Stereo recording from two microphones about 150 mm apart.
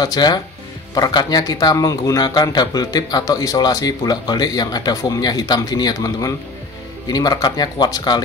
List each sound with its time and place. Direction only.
0.0 s speech: 25° left (ahead or behind)